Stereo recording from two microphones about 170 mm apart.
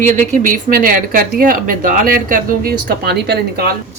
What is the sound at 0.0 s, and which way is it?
Speech, 50° right (ahead or behind).